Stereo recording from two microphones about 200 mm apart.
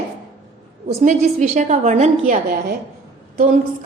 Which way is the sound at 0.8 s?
40° right (ahead or behind).